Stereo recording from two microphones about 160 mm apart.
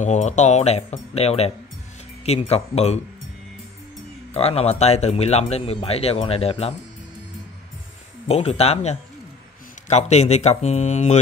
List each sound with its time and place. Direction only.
0.0 s speech: 45° left (ahead or behind)
4.3 s speech: 40° left (ahead or behind)
8.3 s speech: 40° left (ahead or behind)